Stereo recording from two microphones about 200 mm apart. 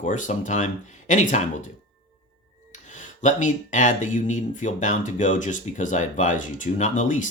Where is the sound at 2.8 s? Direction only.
40° left (ahead or behind).